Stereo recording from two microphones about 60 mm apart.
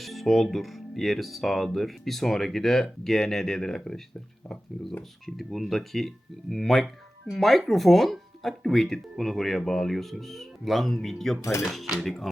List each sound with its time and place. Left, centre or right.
0.0 s speech: centre